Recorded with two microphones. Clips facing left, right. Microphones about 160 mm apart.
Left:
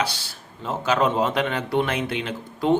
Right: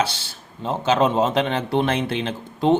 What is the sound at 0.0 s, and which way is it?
Speech, 25° right (ahead or behind).